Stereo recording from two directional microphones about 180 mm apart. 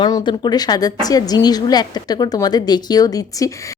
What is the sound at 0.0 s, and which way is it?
A woman's voice, 25° left (ahead or behind).